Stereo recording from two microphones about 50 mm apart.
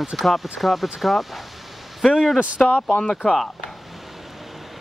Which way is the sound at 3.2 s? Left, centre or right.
Centre.